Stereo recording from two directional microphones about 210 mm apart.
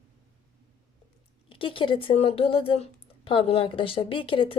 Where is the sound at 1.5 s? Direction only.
25° left (ahead or behind).